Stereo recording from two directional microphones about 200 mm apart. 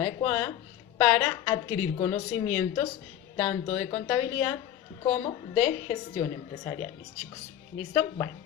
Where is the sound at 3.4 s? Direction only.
20° left (ahead or behind).